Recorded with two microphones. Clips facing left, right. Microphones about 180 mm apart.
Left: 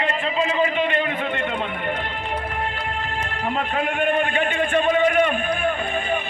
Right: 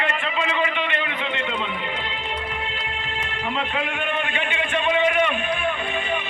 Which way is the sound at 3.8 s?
45° left (ahead or behind).